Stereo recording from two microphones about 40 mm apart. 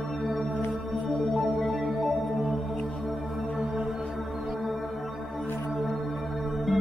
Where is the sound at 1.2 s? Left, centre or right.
Centre.